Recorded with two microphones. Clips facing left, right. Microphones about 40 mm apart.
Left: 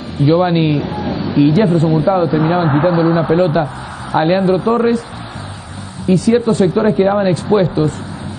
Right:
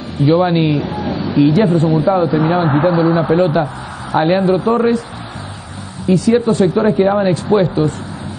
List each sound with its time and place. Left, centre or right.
0.2 s a man's voice: centre
6.0 s a man's voice: centre
6.6 s speech: centre
7.0 s a man's voice: centre